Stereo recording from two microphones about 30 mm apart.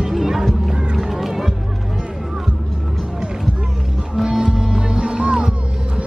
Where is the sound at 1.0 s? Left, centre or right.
Centre.